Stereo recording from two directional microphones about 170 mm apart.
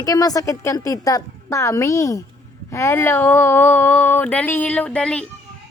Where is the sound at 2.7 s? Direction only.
15° left (ahead or behind).